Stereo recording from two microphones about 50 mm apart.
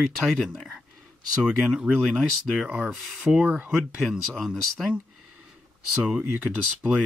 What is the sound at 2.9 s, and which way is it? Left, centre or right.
Speech, centre.